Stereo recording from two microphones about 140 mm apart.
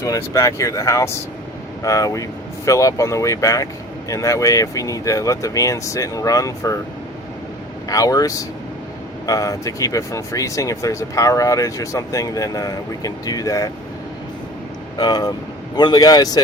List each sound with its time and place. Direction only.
0.0 s speech: 25° left (ahead or behind)
7.9 s speech: 25° left (ahead or behind)
14.9 s speech: 30° left (ahead or behind)